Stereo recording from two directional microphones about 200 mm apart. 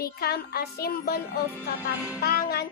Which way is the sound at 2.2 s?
50° left (ahead or behind).